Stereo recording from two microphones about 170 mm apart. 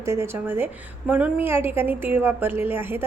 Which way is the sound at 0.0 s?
15° right (ahead or behind).